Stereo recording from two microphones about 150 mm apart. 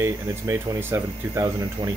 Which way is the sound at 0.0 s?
15° right (ahead or behind).